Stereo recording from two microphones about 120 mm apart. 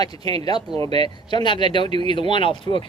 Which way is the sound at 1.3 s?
40° left (ahead or behind).